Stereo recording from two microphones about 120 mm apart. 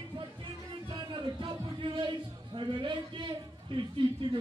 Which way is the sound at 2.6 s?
40° right (ahead or behind).